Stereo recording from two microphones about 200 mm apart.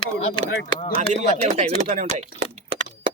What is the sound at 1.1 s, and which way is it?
Speech, 35° right (ahead or behind).